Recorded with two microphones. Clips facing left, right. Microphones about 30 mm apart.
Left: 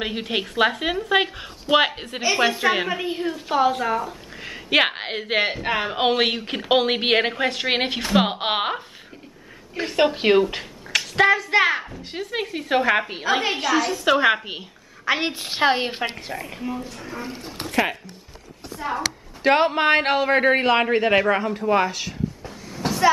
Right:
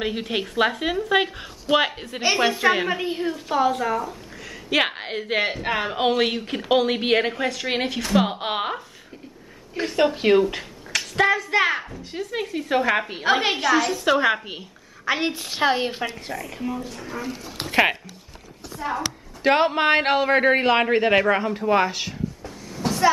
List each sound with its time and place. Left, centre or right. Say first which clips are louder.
0.0 s a woman's voice: even; centre
4.4 s a sound: left 3 dB; left
4.8 s a woman's voice: left 2 dB; left; by 5.9 s centre
5.9 s a woman's voice: left 1 dB; centre
9.9 s a woman's voice: left 1 dB; left
10.5 s a sound: left 3 dB; centre
11.1 s a woman's voice: left 2 dB; centre
11.7 s speech: left 1 dB; centre
12.0 s a woman's voice: left 1 dB; left; by 13.9 s centre
13.9 s a woman's voice: left 2 dB; centre
17.6 s music: right 3 dB; right
18.8 s a woman's voice: left 1 dB; centre
22.4 s a sound: even; centre